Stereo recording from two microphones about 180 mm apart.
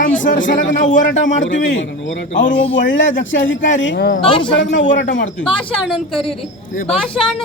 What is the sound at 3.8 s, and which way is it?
Speech, 75° left (ahead or behind).